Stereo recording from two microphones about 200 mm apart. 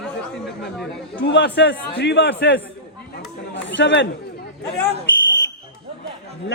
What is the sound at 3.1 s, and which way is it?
Chatter, 60° left (ahead or behind).